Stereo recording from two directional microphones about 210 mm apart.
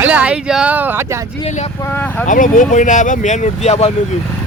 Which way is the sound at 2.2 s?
40° left (ahead or behind).